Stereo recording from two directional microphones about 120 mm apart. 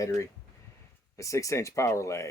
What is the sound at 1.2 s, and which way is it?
Speech, 25° left (ahead or behind).